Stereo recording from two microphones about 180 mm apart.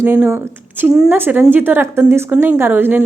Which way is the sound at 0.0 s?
10° right (ahead or behind).